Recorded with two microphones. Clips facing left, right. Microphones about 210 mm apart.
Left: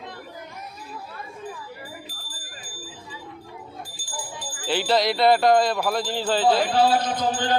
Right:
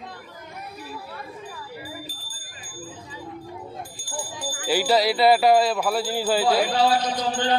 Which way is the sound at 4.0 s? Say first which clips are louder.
Right 4 dB; 65° right (ahead or behind).